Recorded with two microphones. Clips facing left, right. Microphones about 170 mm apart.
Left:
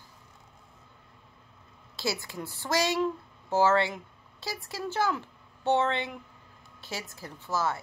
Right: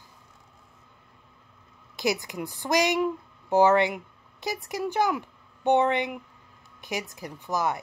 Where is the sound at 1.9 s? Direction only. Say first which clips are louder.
Right 5 dB; 15° right (ahead or behind).